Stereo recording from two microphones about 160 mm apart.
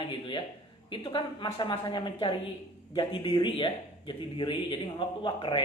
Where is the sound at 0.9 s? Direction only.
30° left (ahead or behind).